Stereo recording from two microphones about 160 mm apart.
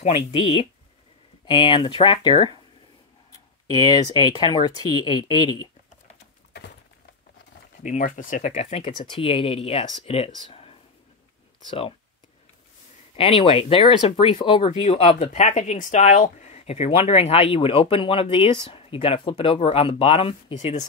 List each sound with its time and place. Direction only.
0.0 s speech: 40° left (ahead or behind)
3.8 s speech: 25° left (ahead or behind)
7.8 s speech: 55° left (ahead or behind)
8.5 s speech: 40° left (ahead or behind)
13.1 s speech: 35° left (ahead or behind)
20.5 s speech: 45° left (ahead or behind)